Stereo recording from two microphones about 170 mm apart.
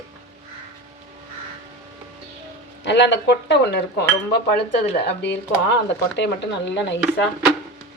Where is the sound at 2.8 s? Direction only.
90° left; by 4.0 s 75° left (ahead or behind).